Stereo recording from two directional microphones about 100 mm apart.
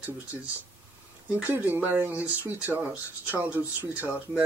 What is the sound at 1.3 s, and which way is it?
Speech, 15° right (ahead or behind).